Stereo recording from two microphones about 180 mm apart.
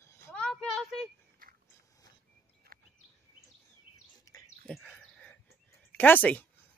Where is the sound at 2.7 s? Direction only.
55° right (ahead or behind).